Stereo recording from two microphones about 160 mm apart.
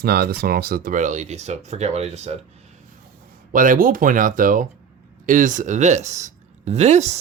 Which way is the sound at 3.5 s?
55° right (ahead or behind).